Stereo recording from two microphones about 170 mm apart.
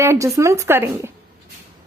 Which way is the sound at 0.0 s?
15° right (ahead or behind).